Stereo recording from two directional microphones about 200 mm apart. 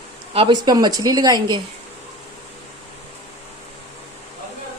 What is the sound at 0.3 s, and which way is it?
A woman's voice, 25° right (ahead or behind).